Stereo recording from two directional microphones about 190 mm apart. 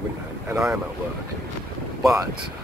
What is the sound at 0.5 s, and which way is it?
Speech, 10° right (ahead or behind).